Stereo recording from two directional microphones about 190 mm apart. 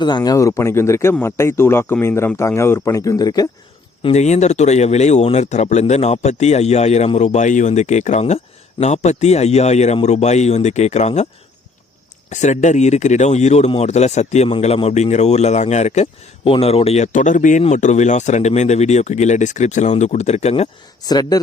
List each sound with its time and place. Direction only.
0.0 s speech: 20° left (ahead or behind)
4.0 s speech: 35° left (ahead or behind)
12.3 s speech: 40° left (ahead or behind)
21.0 s speech: 20° left (ahead or behind)